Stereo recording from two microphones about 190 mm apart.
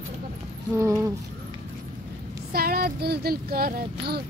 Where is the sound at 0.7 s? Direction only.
15° right (ahead or behind).